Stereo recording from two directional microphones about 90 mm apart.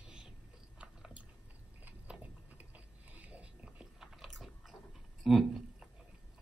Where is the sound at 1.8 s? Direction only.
15° right (ahead or behind).